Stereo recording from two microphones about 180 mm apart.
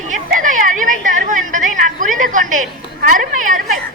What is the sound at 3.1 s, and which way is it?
Speech, 45° right (ahead or behind).